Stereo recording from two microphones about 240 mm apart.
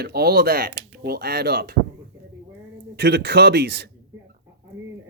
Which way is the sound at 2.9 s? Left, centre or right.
Right.